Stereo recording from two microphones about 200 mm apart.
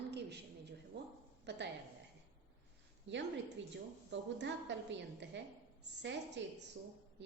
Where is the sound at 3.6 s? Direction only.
65° right (ahead or behind).